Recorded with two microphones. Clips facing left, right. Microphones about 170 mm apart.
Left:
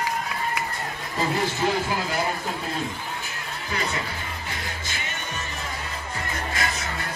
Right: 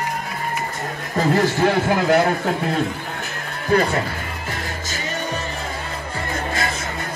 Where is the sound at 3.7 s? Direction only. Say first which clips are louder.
Right 12 dB; 50° right (ahead or behind).